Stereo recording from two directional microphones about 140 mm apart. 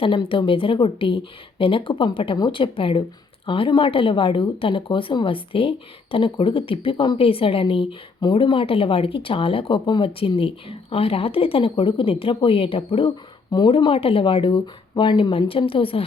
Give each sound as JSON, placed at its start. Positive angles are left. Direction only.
{"t": 0.0, "sound": "speech", "side_deg": 40}